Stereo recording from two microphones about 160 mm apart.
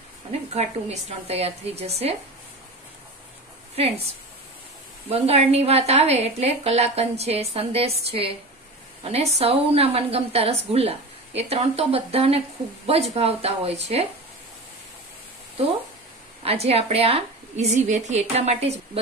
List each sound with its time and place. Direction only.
0.5 s a woman's voice: 40° right (ahead or behind)
5.1 s a woman's voice: 40° right (ahead or behind)
16.4 s a woman's voice: 40° right (ahead or behind)